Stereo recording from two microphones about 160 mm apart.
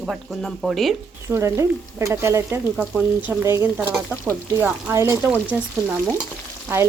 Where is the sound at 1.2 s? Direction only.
20° right (ahead or behind).